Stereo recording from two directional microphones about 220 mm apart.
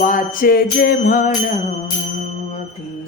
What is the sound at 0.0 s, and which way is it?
Music, 40° left (ahead or behind).